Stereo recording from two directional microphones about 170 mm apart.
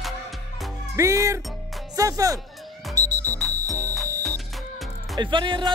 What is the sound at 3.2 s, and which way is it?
Music, 10° left (ahead or behind).